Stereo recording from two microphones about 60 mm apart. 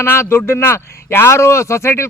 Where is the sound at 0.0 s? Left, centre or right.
Left.